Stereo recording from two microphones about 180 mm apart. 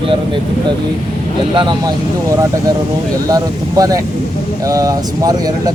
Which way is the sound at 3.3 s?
20° right (ahead or behind).